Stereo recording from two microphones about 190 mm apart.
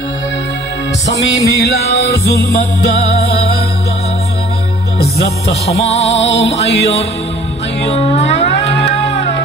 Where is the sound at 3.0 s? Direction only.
30° left (ahead or behind).